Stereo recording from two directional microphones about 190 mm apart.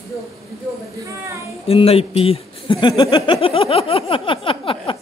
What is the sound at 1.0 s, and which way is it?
Speech, 15° right (ahead or behind).